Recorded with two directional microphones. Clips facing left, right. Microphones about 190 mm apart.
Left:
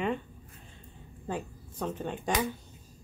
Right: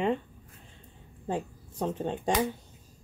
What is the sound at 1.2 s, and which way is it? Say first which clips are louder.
Speech: right 3 dB; 25° right (ahead or behind).